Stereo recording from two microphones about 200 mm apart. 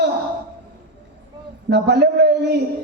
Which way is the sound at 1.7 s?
55° right (ahead or behind).